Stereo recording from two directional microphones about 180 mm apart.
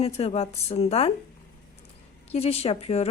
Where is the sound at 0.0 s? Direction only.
35° left (ahead or behind).